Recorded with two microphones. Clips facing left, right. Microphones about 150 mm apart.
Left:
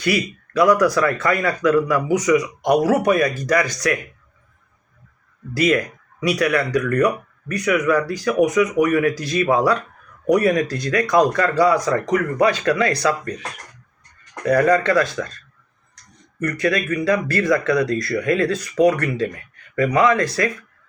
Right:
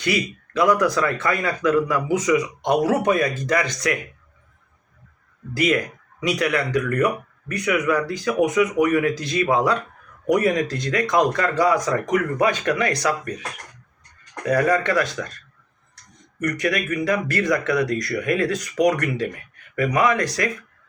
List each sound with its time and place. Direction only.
0.0 s speech: 20° right (ahead or behind)
5.5 s speech: 20° right (ahead or behind)
14.4 s speech: 15° right (ahead or behind)
16.4 s speech: 20° right (ahead or behind)